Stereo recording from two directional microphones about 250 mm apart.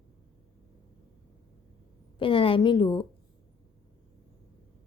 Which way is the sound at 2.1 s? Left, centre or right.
Left.